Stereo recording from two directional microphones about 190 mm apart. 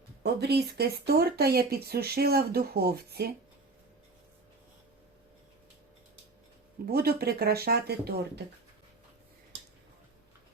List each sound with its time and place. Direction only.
0.2 s speech: 60° right (ahead or behind)
6.8 s speech: 55° right (ahead or behind)